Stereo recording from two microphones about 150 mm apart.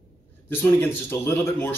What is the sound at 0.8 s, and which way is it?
Speech, 15° left (ahead or behind).